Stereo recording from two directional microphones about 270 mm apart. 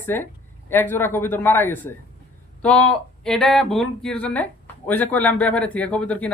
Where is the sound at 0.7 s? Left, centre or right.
Centre.